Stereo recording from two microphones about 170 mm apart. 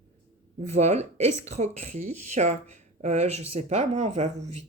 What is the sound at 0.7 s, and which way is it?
Speech, 40° right (ahead or behind).